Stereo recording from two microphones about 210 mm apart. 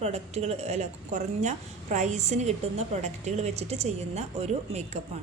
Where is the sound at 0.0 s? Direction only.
30° right (ahead or behind).